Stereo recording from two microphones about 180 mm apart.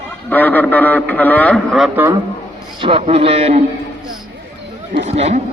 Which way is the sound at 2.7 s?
30° right (ahead or behind).